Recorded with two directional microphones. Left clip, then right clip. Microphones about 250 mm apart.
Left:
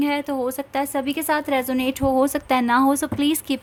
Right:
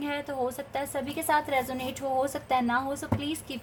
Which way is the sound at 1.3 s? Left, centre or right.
Left.